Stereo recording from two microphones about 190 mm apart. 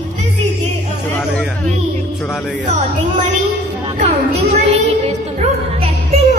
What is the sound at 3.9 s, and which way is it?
Music, 35° right (ahead or behind).